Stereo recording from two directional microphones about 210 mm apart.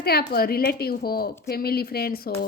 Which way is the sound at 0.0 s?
45° left (ahead or behind).